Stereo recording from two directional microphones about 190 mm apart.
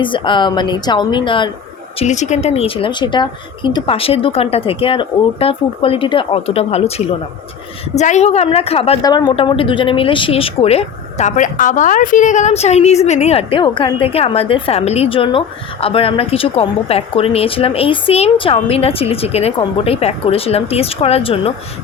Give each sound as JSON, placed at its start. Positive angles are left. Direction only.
{"t": 0.0, "sound": "speech", "side_deg": 25}
{"t": 2.0, "sound": "speech", "side_deg": 40}
{"t": 9.0, "sound": "speech", "side_deg": 20}